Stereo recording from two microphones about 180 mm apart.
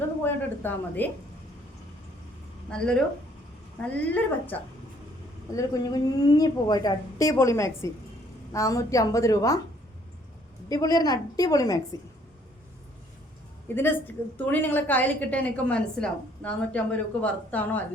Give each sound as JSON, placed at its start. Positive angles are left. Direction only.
{"t": 0.2, "sound": "a sound", "side_deg": 10}
{"t": 2.6, "sound": "a woman's voice", "side_deg": 5}
{"t": 5.5, "sound": "a woman's voice", "side_deg": 20}
{"t": 10.7, "sound": "a woman's voice", "side_deg": 20}
{"t": 13.7, "sound": "a woman's voice", "side_deg": 10}